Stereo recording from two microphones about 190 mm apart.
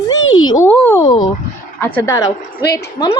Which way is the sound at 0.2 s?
90° left.